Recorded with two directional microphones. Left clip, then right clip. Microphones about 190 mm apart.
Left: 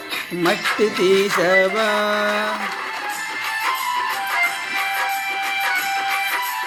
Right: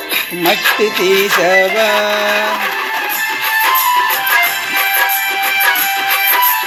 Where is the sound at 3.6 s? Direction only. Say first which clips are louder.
Right 9 dB; 40° right (ahead or behind).